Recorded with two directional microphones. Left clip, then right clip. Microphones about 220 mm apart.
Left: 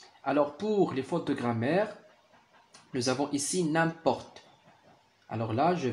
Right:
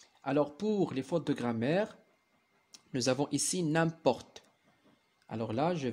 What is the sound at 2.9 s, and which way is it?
Speech, 45° right (ahead or behind).